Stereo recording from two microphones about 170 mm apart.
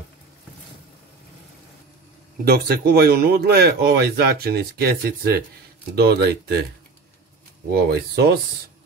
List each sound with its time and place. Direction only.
2.4 s speech: 70° right (ahead or behind)
7.9 s speech: 80° right